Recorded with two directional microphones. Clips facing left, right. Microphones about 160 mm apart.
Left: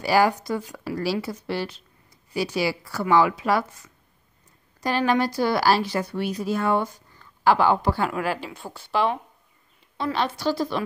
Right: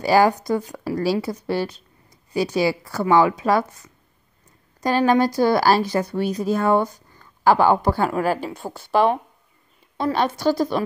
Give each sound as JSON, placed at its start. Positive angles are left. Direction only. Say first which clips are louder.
{"t": 0.0, "sound": "a woman's voice", "louder": "right 3 dB", "side_deg": -45}
{"t": 4.8, "sound": "a woman's voice", "louder": "right 4 dB", "side_deg": -45}